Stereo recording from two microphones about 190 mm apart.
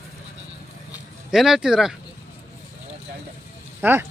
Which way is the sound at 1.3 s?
Centre (ahead or behind).